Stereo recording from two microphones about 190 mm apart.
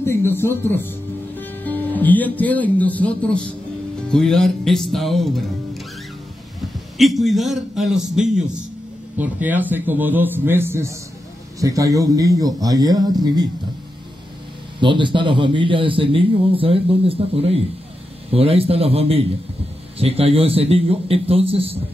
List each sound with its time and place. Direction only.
0.0 s a man's voice: 10° left (ahead or behind)
7.0 s a man's voice: centre (ahead or behind); by 13.5 s 20° right (ahead or behind)
14.8 s a man's voice: 25° right (ahead or behind)